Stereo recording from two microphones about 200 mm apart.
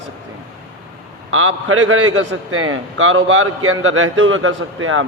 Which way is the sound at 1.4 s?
90° right.